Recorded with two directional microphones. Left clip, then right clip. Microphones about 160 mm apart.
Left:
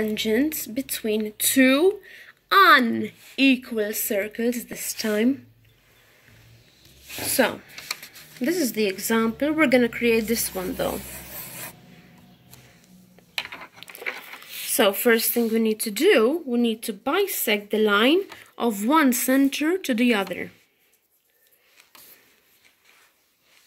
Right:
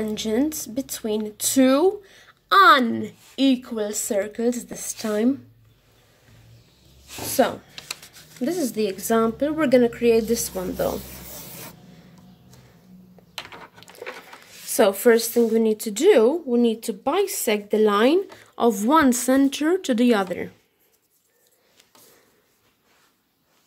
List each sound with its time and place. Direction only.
0.0 s speech: 5° right (ahead or behind)
7.4 s speech: centre (ahead or behind)
13.7 s patter: 20° right (ahead or behind)
14.7 s a woman's voice: 20° right (ahead or behind)